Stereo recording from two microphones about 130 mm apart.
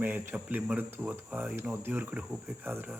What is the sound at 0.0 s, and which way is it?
Speech, 15° right (ahead or behind).